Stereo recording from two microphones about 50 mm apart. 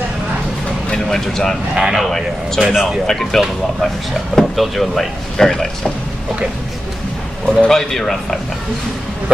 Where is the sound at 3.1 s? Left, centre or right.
Centre.